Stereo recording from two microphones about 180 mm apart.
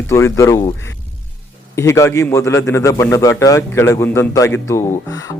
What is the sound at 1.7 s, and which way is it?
A man's voice, 15° left (ahead or behind).